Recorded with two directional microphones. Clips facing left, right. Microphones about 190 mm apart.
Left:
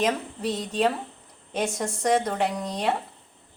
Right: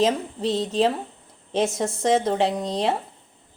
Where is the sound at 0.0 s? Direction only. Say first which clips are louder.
Right 4 dB; 25° right (ahead or behind).